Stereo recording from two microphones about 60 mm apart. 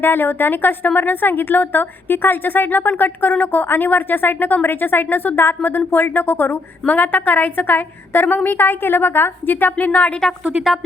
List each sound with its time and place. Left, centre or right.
0.0 s a woman's voice: left
9.7 s speech: left